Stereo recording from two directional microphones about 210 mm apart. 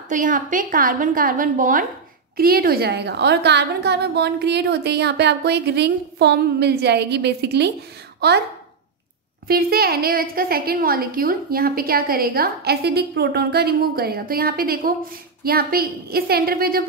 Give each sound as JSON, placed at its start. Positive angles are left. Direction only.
{"t": 0.1, "sound": "a woman's voice", "side_deg": -40}
{"t": 9.5, "sound": "a woman's voice", "side_deg": -45}